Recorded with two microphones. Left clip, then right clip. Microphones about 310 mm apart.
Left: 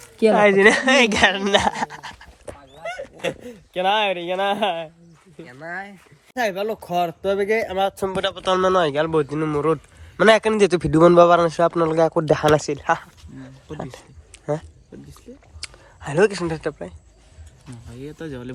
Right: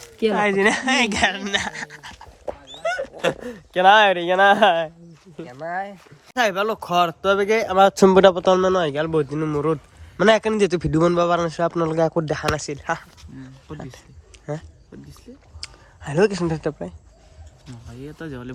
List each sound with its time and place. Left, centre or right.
0.2 s speech: centre
2.6 s speech: centre
6.3 s speech: centre
7.8 s speech: right; by 14.0 s centre
14.3 s a sound: centre
14.9 s speech: centre